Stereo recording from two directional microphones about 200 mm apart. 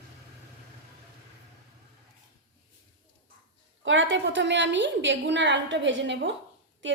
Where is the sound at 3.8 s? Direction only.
70° right (ahead or behind).